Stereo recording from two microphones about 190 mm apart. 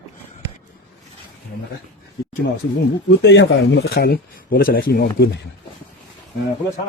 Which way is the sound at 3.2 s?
70° left (ahead or behind).